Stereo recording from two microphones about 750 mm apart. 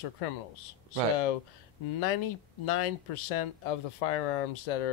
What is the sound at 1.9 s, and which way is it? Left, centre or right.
Speech, left.